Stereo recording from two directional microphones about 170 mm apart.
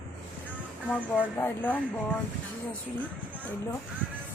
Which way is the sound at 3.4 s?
15° left (ahead or behind).